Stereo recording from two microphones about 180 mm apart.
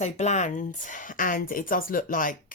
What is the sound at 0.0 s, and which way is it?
A woman's voice, 40° left (ahead or behind).